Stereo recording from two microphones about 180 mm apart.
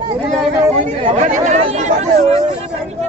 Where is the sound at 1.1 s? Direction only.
40° right (ahead or behind).